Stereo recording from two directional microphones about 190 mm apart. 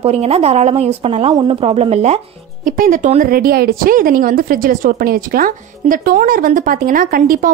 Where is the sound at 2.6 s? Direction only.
45° right (ahead or behind).